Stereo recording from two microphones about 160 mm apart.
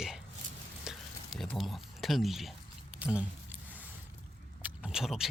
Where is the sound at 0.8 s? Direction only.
Centre (ahead or behind).